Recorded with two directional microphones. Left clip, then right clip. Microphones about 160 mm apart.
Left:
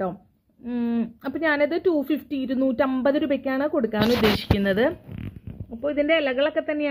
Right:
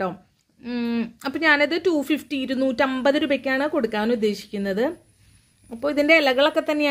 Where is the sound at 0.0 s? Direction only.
10° right (ahead or behind).